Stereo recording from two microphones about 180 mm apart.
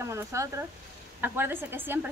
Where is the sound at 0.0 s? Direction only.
15° right (ahead or behind).